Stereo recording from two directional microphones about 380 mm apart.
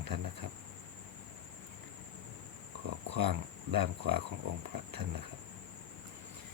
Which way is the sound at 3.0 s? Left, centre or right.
Right.